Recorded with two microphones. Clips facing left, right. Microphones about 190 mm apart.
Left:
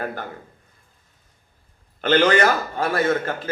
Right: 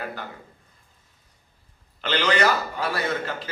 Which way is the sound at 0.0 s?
50° left (ahead or behind).